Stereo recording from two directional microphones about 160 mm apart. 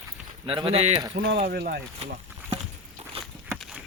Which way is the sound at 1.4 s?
85° right.